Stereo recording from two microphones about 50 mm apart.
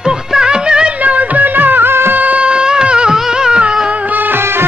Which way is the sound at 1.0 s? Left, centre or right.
Right.